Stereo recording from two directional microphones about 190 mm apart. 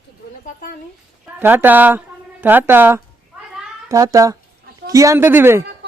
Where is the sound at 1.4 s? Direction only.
10° right (ahead or behind).